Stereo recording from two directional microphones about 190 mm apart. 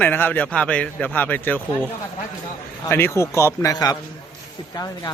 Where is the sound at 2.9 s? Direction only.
15° left (ahead or behind).